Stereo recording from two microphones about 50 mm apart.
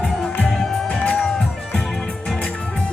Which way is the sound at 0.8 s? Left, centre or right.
Left.